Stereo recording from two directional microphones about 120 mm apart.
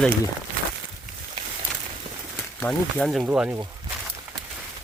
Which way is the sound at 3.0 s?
5° right (ahead or behind).